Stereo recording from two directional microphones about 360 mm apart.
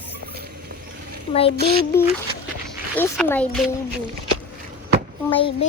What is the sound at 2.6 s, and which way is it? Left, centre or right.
Speech, centre.